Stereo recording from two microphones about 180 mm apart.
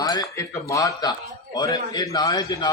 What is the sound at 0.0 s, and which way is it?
A man's voice, 20° left (ahead or behind).